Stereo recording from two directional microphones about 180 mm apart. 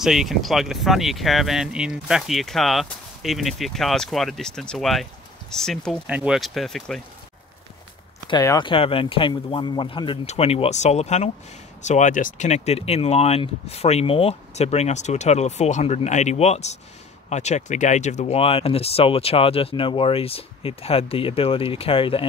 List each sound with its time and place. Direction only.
0.0 s speech: centre (ahead or behind)
8.3 s speech: 20° left (ahead or behind)